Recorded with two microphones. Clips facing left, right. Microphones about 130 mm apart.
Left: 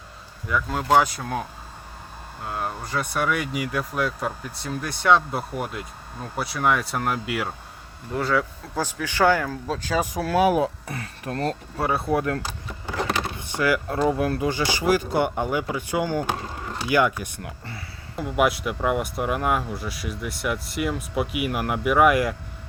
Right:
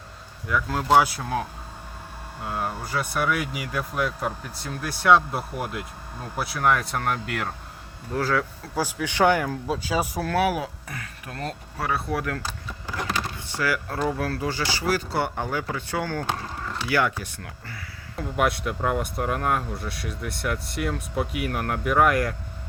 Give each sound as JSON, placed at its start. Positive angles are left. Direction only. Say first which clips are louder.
{"t": 0.4, "sound": "speech", "louder": "even", "side_deg": 0}
{"t": 2.5, "sound": "speech", "louder": "even", "side_deg": 0}
{"t": 10.3, "sound": "speech", "louder": "left 5 dB", "side_deg": 25}
{"t": 11.8, "sound": "speech", "louder": "left 4 dB", "side_deg": 25}
{"t": 13.5, "sound": "speech", "louder": "left 4 dB", "side_deg": 20}
{"t": 18.2, "sound": "speech", "louder": "left 2 dB", "side_deg": 5}